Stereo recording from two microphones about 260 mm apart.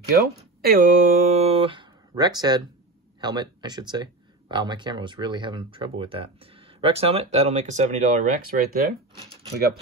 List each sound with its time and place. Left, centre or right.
0.1 s speech: right